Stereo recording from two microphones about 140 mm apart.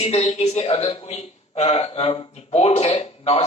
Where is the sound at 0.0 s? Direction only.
50° left (ahead or behind).